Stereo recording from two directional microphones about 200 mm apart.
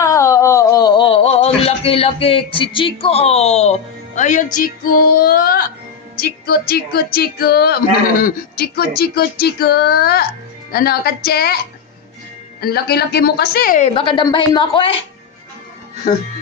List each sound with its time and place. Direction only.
0.0 s a sound: 15° left (ahead or behind); by 5.6 s 45° left (ahead or behind)
6.1 s a woman's voice: 50° left (ahead or behind)
12.5 s a woman's voice: 50° left (ahead or behind); by 14.9 s 25° left (ahead or behind)